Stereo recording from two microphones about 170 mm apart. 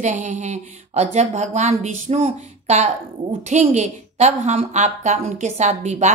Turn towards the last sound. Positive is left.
turn(degrees=-40)  # may be behind; listen again after turning